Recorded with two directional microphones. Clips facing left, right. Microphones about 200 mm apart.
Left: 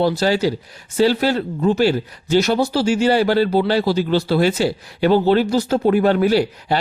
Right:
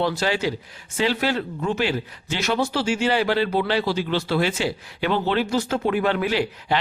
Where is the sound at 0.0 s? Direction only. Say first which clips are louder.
Left 6 dB; 35° left (ahead or behind).